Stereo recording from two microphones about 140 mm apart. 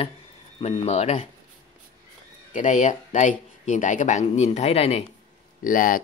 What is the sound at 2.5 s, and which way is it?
Speech, 65° left (ahead or behind).